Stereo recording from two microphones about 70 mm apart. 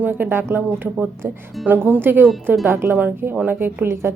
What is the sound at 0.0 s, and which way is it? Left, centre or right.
A woman's voice, right.